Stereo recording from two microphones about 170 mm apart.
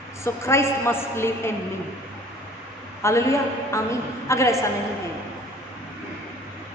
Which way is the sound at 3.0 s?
15° left (ahead or behind).